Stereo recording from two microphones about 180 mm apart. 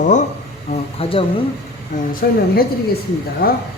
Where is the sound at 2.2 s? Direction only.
60° left (ahead or behind).